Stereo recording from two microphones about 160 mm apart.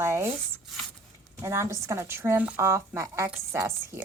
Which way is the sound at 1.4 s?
20° right (ahead or behind).